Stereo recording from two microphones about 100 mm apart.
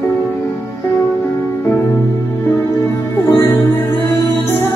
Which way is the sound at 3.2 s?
25° left (ahead or behind).